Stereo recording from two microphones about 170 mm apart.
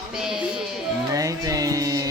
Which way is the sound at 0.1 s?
5° right (ahead or behind).